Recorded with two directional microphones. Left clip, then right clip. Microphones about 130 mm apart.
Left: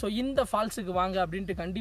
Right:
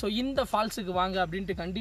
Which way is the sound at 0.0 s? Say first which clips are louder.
Left 1 dB; 5° left (ahead or behind).